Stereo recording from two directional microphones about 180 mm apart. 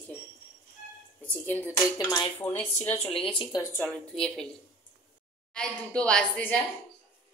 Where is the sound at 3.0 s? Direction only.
30° left (ahead or behind).